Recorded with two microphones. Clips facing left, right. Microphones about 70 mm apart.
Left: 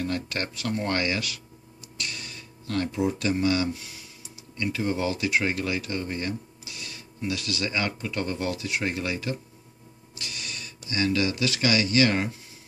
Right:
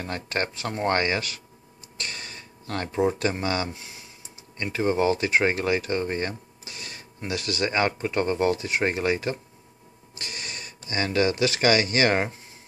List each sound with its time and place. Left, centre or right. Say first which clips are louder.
0.0 s speech: right 1 dB; right